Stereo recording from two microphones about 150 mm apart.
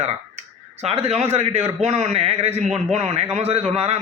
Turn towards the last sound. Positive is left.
turn(degrees=-45)  # may be behind; listen again after turning